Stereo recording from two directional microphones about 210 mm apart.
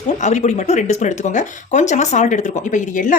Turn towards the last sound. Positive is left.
turn(degrees=35)  # may be behind; listen again after turning